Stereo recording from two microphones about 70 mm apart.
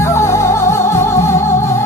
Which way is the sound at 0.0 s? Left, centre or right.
Left.